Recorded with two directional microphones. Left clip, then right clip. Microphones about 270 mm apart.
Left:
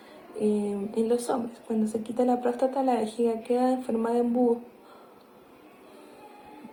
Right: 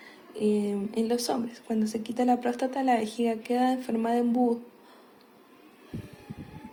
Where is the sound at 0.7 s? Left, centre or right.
Right.